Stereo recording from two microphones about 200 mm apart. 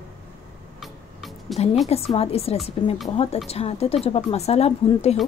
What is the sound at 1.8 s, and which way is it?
A woman's voice, 30° left (ahead or behind).